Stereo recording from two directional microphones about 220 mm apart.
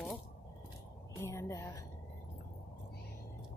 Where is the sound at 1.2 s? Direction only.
10° left (ahead or behind).